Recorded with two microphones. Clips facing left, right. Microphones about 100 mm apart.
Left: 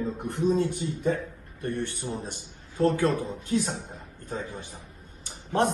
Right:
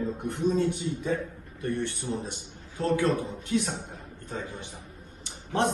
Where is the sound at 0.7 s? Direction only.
55° left (ahead or behind).